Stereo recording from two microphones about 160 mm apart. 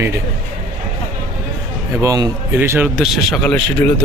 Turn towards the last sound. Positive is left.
turn(degrees=5)  # may be behind; listen again after turning